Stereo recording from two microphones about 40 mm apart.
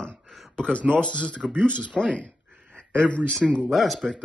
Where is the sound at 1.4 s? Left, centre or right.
Centre.